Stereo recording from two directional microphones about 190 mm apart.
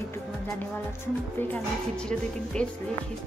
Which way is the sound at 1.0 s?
10° left (ahead or behind).